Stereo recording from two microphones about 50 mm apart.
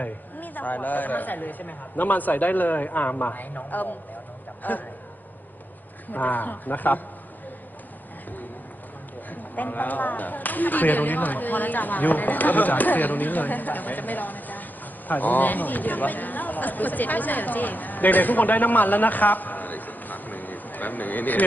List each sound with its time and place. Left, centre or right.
0.0 s speech: left
6.1 s speech: left
9.3 s speech: left